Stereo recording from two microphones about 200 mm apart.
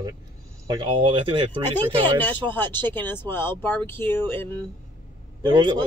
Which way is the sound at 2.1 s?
10° left (ahead or behind).